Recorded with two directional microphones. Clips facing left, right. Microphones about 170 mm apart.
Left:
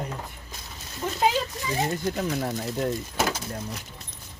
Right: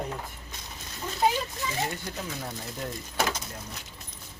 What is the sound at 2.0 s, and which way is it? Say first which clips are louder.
Speech: left 9 dB; 60° left (ahead or behind).